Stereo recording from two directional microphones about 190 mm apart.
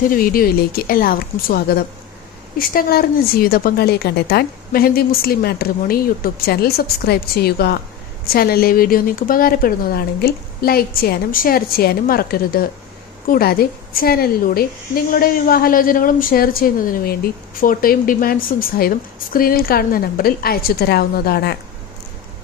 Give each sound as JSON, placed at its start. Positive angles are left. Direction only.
{"t": 0.1, "sound": "a woman's voice", "side_deg": 50}